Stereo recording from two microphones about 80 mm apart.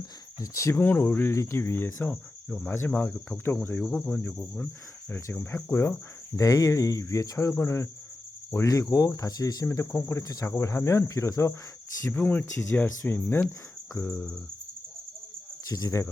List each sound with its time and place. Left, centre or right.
0.3 s speech: left
1.3 s speech: left; by 4.7 s centre
5.1 s speech: left
8.6 s speech: left
9.6 s speech: left
12.1 s speech: left
15.7 s speech: left